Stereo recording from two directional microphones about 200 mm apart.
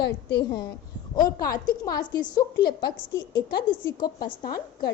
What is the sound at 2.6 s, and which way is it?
Speech, 50° left (ahead or behind).